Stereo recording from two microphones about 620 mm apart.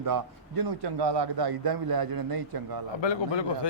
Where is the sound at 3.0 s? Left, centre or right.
Left.